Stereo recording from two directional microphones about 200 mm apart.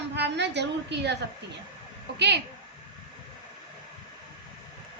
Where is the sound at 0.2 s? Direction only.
60° right (ahead or behind).